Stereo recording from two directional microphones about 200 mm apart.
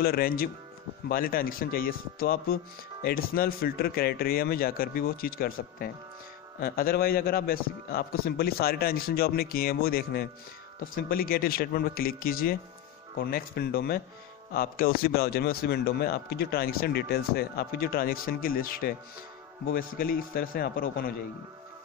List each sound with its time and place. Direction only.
0.0 s speech: 50° left (ahead or behind)